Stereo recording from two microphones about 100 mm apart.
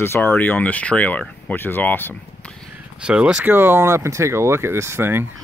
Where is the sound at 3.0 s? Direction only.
10° right (ahead or behind).